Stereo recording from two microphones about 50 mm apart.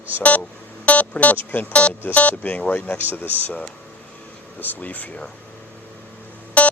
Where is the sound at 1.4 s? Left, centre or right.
Left.